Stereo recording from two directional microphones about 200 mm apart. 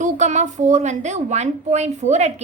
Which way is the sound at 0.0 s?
35° right (ahead or behind).